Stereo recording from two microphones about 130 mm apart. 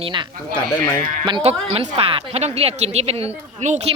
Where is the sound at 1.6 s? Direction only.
55° right (ahead or behind).